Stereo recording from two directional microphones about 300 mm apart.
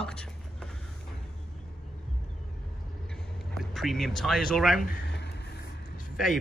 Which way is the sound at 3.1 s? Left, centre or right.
Centre.